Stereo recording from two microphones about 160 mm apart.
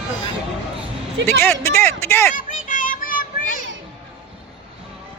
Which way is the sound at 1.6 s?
15° left (ahead or behind).